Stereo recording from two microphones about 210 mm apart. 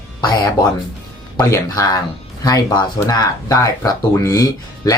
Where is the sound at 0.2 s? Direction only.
20° left (ahead or behind).